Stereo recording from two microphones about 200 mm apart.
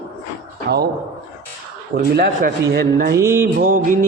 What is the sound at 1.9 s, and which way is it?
A man's voice, 50° right (ahead or behind).